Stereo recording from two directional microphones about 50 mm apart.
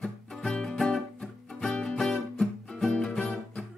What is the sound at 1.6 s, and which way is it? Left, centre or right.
Music, left.